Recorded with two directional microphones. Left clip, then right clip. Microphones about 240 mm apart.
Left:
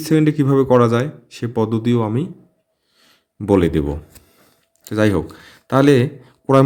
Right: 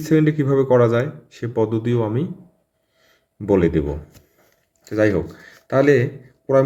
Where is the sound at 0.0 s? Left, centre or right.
Left.